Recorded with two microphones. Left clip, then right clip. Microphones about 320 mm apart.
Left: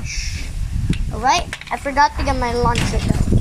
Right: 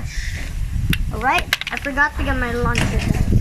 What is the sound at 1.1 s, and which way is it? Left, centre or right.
Speech, centre.